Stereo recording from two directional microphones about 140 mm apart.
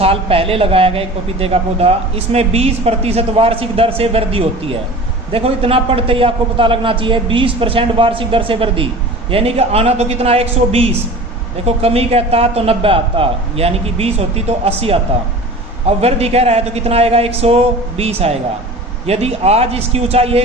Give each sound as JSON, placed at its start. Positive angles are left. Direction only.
{"t": 0.0, "sound": "a man's voice", "side_deg": -45}